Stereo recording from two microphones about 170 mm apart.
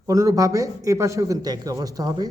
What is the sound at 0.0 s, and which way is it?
Speech, 20° right (ahead or behind).